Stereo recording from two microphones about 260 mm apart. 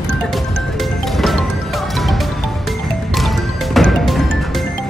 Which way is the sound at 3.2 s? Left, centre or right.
Centre.